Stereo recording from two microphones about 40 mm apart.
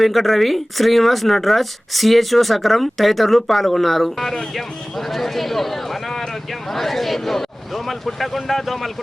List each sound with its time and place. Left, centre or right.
0.0 s speech: centre